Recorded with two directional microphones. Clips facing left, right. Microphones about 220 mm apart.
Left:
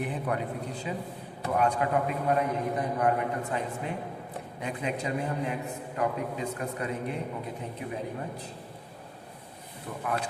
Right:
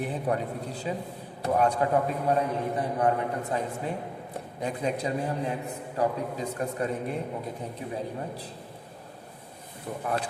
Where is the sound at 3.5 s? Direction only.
35° right (ahead or behind).